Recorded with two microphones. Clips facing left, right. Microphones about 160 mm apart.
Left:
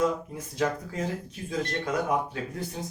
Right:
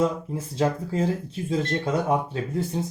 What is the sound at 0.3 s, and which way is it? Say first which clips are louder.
Speech: right 4 dB; 30° right (ahead or behind).